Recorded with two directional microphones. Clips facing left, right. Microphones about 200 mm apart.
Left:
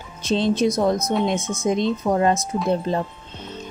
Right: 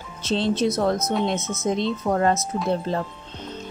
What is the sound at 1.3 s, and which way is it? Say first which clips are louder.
Speech: left 2 dB; 15° left (ahead or behind).